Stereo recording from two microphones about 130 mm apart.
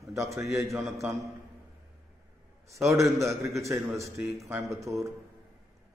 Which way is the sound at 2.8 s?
25° right (ahead or behind).